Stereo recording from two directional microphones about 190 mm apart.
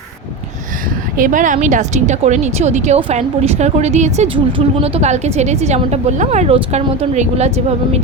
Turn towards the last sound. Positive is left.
turn(degrees=-35)  # may be behind; listen again after turning